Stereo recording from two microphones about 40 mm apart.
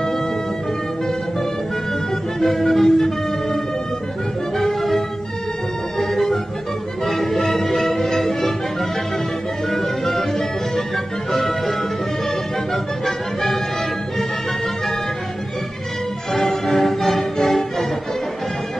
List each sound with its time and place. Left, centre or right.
2.4 s music: centre
4.6 s music: centre
5.9 s organ: centre
7.1 s music: centre
9.7 s music: centre
12.7 s music: centre
16.3 s music: centre